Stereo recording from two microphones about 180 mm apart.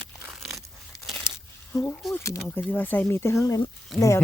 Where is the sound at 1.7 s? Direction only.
10° left (ahead or behind).